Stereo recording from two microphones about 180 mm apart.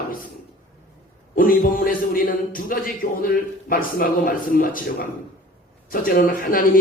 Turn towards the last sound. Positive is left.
turn(degrees=50)  # may be behind; listen again after turning